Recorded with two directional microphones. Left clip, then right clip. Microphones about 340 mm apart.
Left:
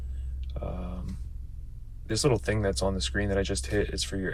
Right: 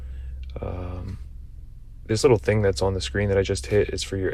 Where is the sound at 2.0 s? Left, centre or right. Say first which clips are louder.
Right 8 dB; centre.